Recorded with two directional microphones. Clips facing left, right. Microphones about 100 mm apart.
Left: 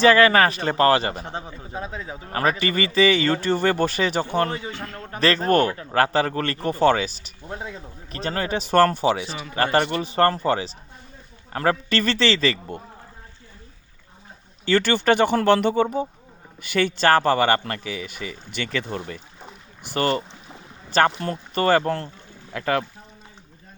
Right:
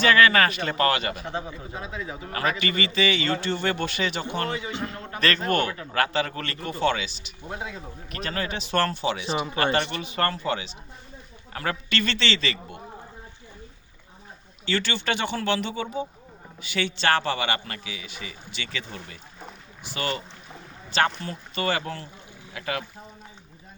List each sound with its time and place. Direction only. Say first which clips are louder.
0.0 s a man's voice: left 4 dB; 35° left (ahead or behind)
4.7 s a man's voice: right 2 dB; 20° right (ahead or behind)
5.1 s a man's voice: left 5 dB; 35° left (ahead or behind)
9.2 s a man's voice: right 6 dB; 25° right (ahead or behind)
10.0 s a man's voice: left 7 dB; 35° left (ahead or behind)
14.6 s a man's voice: left 8 dB; 45° left (ahead or behind)